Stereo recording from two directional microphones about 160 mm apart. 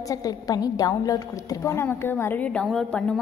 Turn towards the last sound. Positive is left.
turn(degrees=5)  # may be behind; listen again after turning